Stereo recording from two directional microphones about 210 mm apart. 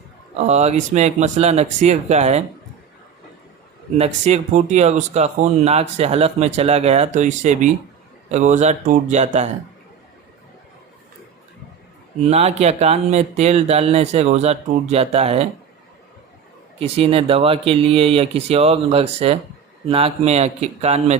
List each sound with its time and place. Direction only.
0.3 s speech: 30° right (ahead or behind)
3.9 s speech: 30° right (ahead or behind)
12.3 s speech: 30° right (ahead or behind)
16.7 s speech: 25° right (ahead or behind)